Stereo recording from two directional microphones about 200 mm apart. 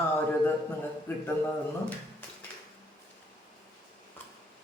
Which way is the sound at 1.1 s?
10° left (ahead or behind).